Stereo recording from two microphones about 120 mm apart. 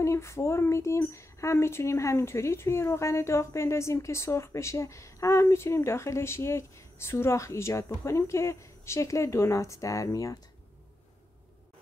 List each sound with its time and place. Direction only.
0.0 s speech: 25° left (ahead or behind)